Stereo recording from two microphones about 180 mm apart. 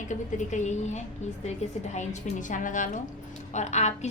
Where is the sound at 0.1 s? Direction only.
40° left (ahead or behind).